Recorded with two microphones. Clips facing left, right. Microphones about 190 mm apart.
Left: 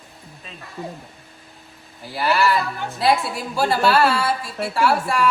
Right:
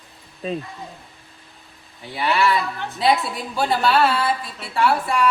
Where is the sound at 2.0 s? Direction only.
Centre (ahead or behind).